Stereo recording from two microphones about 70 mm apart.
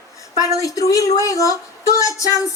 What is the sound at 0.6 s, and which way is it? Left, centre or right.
Speech, left.